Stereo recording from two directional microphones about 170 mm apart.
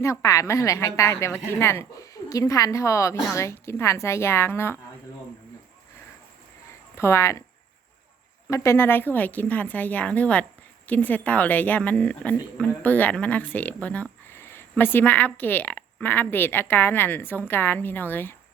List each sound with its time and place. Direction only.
0.0 s speech: 20° left (ahead or behind)
6.9 s speech: 15° left (ahead or behind)
8.4 s speech: 15° left (ahead or behind)